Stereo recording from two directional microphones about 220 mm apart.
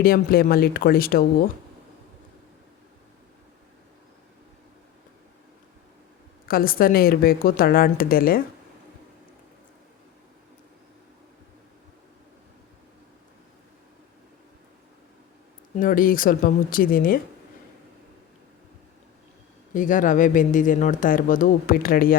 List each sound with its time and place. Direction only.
0.0 s speech: 45° left (ahead or behind)
6.5 s speech: 40° left (ahead or behind)
15.8 s speech: 40° left (ahead or behind)
19.7 s speech: 35° left (ahead or behind)